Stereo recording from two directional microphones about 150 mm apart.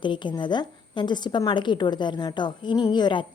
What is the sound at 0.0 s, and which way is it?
A woman's voice, 30° left (ahead or behind).